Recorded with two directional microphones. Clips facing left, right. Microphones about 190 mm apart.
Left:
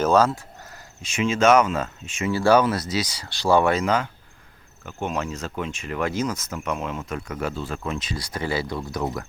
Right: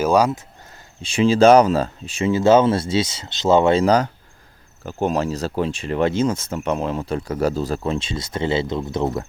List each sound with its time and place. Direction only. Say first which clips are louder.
0.0 s speech: right 2 dB; 15° right (ahead or behind)
1.0 s speech: right 6 dB; 30° right (ahead or behind)
2.3 s speech: right 4 dB; 20° right (ahead or behind)